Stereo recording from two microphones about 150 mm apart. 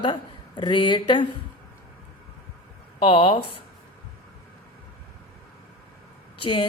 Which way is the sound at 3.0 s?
35° left (ahead or behind).